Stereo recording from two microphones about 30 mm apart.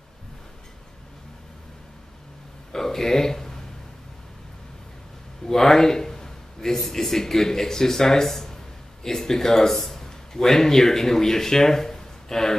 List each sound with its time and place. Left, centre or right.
2.7 s speech: centre
5.5 s a sound: centre
6.9 s a man's voice: centre